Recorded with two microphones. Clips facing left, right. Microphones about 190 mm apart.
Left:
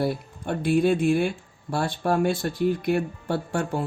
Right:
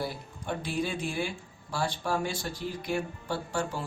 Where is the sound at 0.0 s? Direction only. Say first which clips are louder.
Left 9 dB; 55° left (ahead or behind).